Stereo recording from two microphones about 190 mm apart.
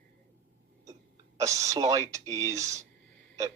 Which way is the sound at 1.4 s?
15° right (ahead or behind).